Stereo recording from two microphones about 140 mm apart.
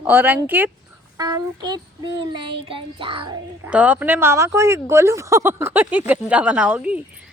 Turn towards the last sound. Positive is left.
turn(degrees=-10)  # may be behind; listen again after turning